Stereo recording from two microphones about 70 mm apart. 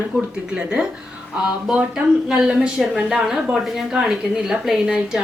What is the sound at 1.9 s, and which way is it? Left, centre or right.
A woman's voice, centre.